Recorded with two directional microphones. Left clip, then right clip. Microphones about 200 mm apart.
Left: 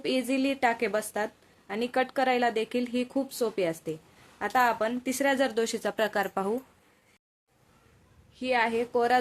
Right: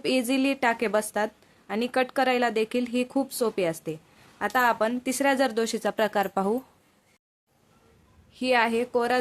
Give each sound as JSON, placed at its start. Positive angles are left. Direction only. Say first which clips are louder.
{"t": 0.0, "sound": "a woman's voice", "louder": "right 3 dB", "side_deg": -25}
{"t": 8.4, "sound": "a woman's voice", "louder": "right 3 dB", "side_deg": -35}